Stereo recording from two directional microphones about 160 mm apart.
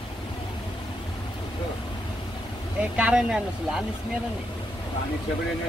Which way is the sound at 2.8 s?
5° right (ahead or behind).